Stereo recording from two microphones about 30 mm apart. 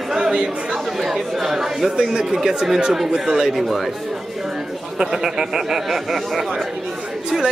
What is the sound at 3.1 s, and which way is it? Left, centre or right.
Speech, right.